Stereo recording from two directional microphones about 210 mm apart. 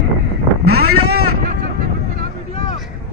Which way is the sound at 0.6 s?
90° right.